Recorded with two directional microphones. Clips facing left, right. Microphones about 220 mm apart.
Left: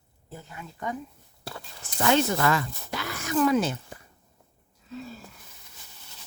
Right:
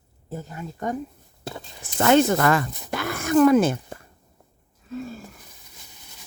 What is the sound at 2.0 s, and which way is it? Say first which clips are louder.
Speech: right 6 dB; 50° right (ahead or behind).